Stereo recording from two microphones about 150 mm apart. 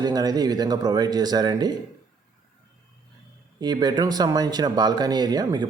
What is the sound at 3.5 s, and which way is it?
Speech, 30° right (ahead or behind).